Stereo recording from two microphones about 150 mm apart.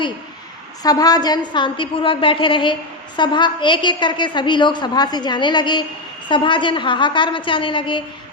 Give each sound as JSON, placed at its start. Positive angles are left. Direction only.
{"t": 0.8, "sound": "a woman's voice", "side_deg": 25}